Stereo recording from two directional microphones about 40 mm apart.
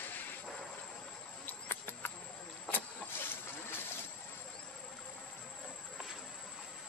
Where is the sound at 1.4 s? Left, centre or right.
Left.